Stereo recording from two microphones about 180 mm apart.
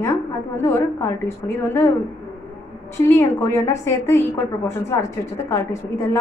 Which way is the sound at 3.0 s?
15° left (ahead or behind).